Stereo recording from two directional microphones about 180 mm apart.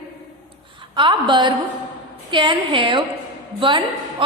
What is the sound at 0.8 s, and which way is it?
A woman's voice, 25° right (ahead or behind).